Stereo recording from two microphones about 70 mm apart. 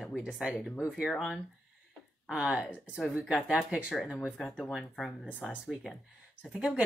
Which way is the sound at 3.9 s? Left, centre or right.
Centre.